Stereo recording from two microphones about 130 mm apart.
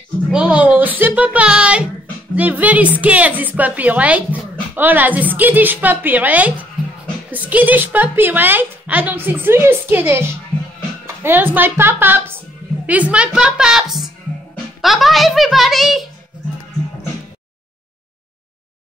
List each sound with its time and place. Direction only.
0.3 s a woman's voice: 5° right (ahead or behind)
11.2 s a woman's voice: 15° right (ahead or behind)